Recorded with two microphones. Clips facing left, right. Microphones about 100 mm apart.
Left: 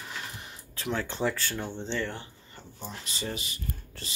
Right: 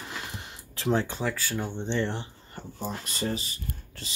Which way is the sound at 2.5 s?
45° right (ahead or behind).